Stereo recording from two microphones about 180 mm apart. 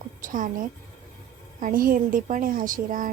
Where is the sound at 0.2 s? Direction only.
45° right (ahead or behind).